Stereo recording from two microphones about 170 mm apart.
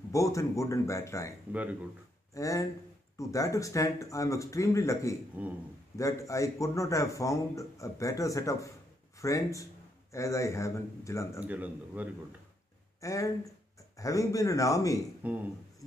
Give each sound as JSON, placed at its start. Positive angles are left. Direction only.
{"t": 0.1, "sound": "speech", "side_deg": 20}
{"t": 1.5, "sound": "a man's voice", "side_deg": -10}
{"t": 2.3, "sound": "a man's voice", "side_deg": 20}
{"t": 5.4, "sound": "a man's voice", "side_deg": -10}
{"t": 5.9, "sound": "a man's voice", "side_deg": 20}
{"t": 11.4, "sound": "a man's voice", "side_deg": -10}
{"t": 13.0, "sound": "a man's voice", "side_deg": 20}
{"t": 15.2, "sound": "a man's voice", "side_deg": -10}